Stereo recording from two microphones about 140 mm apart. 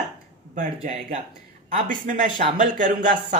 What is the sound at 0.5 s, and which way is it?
Speech, 65° right (ahead or behind).